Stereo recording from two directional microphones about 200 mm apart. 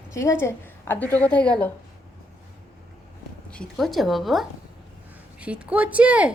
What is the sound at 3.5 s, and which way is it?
Speech, 5° left (ahead or behind).